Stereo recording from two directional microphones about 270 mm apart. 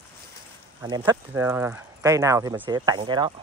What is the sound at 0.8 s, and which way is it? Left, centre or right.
Speech, centre.